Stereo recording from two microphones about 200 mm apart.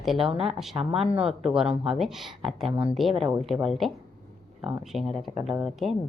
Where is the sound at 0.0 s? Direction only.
Centre (ahead or behind).